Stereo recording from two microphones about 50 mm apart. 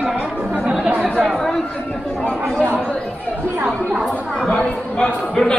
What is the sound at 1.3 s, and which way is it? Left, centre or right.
Chatter, centre.